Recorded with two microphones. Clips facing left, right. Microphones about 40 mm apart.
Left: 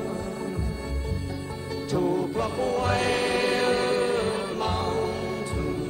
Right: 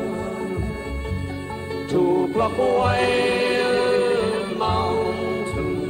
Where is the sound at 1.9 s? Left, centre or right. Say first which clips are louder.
Right 6 dB; right.